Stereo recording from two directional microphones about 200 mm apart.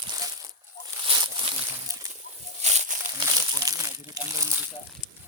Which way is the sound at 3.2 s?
20° right (ahead or behind).